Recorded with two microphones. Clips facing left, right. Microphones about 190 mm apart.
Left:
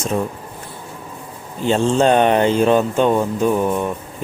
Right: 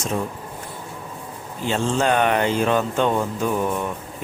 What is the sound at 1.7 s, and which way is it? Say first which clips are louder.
Speech: left 6 dB; 30° left (ahead or behind).